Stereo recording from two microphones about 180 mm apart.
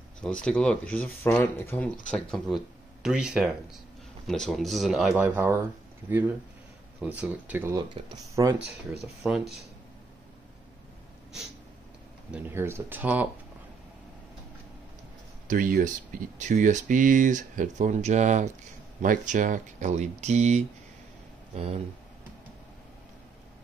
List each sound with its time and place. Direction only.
0.2 s speech: 5° left (ahead or behind); by 8.5 s 20° right (ahead or behind)
9.2 s speech: 5° right (ahead or behind)
12.3 s speech: 10° right (ahead or behind)
15.4 s speech: 50° right (ahead or behind)